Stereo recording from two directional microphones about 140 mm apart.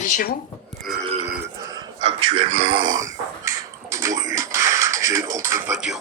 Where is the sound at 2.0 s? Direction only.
40° right (ahead or behind); by 3.5 s 25° right (ahead or behind).